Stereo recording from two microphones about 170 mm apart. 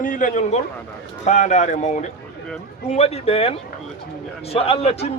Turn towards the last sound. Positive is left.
turn(degrees=40)  # may be behind; listen again after turning